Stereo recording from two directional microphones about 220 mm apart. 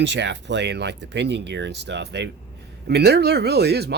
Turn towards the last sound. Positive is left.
turn(degrees=-45)  # may be behind; listen again after turning